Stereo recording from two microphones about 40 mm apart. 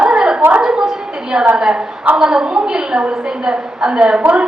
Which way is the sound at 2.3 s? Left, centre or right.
Centre.